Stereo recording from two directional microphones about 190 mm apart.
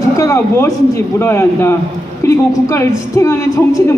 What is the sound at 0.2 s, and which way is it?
A man's voice, 15° left (ahead or behind).